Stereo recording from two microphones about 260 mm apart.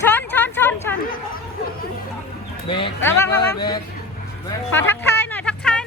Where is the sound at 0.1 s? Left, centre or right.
Centre.